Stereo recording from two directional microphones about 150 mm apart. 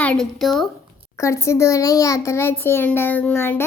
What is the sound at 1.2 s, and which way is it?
A child's voice, 20° left (ahead or behind).